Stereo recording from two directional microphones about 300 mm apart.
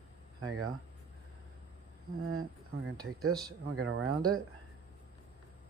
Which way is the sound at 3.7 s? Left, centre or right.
Right.